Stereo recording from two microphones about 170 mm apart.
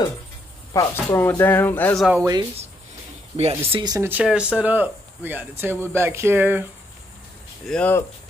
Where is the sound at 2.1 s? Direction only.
20° right (ahead or behind).